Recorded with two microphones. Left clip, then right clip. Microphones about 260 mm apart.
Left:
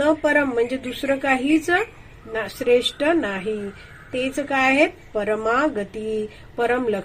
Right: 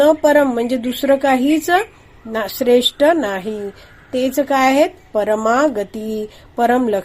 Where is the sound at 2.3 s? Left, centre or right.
Right.